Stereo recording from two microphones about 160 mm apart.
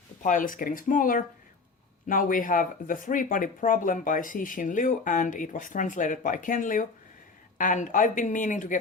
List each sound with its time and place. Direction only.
0.2 s speech: 55° left (ahead or behind)